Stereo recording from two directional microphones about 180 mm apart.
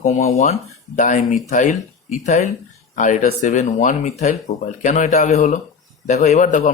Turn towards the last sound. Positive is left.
turn(degrees=40)  # may be behind; listen again after turning